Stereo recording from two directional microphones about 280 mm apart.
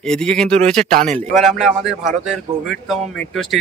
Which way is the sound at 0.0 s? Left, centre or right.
Centre.